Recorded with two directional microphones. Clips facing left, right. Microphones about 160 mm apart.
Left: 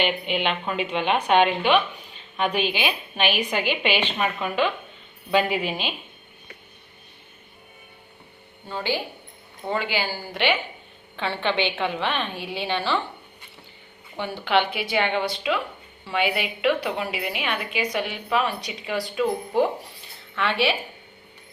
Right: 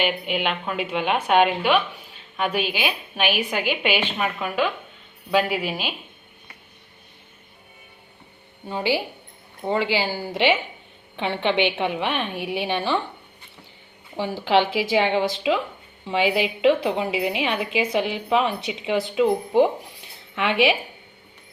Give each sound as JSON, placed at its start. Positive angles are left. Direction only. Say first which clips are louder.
{"t": 0.0, "sound": "a woman's voice", "louder": "even", "side_deg": -5}
{"t": 8.6, "sound": "a woman's voice", "louder": "right 4 dB", "side_deg": -15}
{"t": 14.2, "sound": "a woman's voice", "louder": "right 3 dB", "side_deg": -25}
{"t": 14.6, "sound": "a woman's voice", "louder": "right 4 dB", "side_deg": -90}
{"t": 15.1, "sound": "a woman's voice", "louder": "right 3 dB", "side_deg": -25}